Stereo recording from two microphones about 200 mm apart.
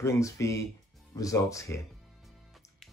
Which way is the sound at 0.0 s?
15° left (ahead or behind).